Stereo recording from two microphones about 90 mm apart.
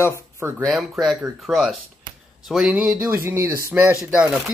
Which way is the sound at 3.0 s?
30° right (ahead or behind).